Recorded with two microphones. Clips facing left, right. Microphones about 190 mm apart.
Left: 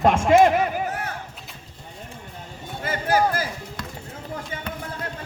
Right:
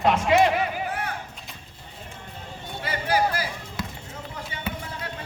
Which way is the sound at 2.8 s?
45° left (ahead or behind).